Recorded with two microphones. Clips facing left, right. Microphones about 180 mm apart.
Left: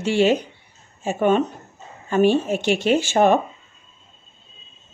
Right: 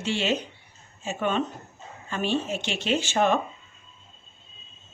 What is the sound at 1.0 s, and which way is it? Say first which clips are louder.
A woman's voice: left 8 dB; 50° left (ahead or behind).